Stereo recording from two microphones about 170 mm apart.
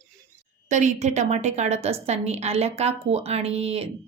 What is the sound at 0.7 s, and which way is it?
A woman's voice, 45° right (ahead or behind).